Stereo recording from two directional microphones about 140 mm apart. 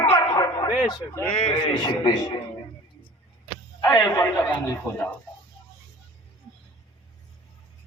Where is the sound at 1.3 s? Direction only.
45° left (ahead or behind).